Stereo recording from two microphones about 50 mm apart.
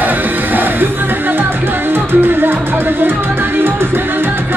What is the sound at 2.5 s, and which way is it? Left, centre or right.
Music, right.